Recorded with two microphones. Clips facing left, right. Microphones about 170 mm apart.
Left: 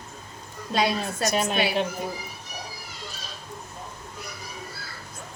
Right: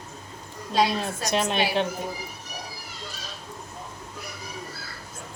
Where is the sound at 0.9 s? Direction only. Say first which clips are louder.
Even; centre (ahead or behind).